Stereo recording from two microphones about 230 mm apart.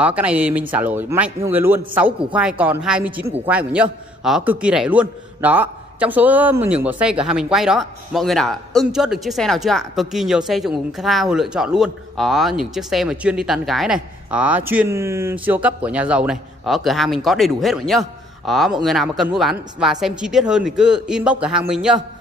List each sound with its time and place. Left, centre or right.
0.0 s a man's voice: centre